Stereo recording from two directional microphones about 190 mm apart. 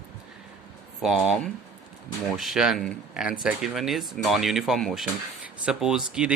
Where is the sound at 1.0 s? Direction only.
Centre (ahead or behind).